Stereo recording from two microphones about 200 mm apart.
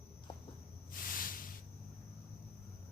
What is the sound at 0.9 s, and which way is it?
Snake, 45° left (ahead or behind).